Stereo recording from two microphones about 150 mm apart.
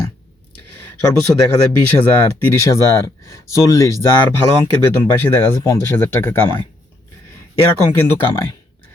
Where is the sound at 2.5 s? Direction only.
20° left (ahead or behind).